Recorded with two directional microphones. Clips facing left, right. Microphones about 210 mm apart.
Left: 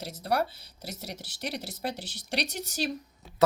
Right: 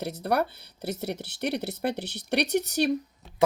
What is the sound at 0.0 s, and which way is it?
Speech, 60° right (ahead or behind).